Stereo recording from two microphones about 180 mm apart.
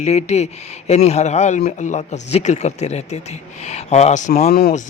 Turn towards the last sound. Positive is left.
turn(degrees=40)  # may be behind; listen again after turning